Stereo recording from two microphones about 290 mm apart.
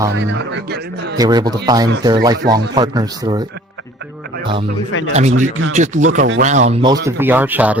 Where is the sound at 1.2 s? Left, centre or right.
Centre.